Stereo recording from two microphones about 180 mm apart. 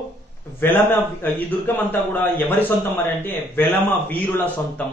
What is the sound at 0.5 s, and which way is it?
A man's voice, 10° left (ahead or behind).